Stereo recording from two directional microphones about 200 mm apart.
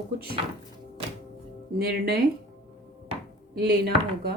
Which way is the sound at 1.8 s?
50° right (ahead or behind).